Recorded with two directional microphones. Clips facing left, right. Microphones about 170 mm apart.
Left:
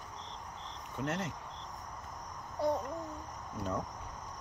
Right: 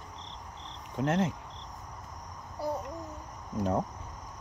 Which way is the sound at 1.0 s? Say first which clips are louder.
Right 8 dB; 90° right.